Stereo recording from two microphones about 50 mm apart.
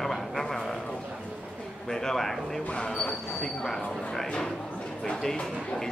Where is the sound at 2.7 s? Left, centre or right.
Centre.